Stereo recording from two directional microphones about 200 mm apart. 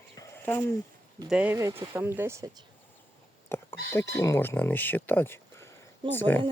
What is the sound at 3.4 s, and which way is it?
Speech, 10° left (ahead or behind).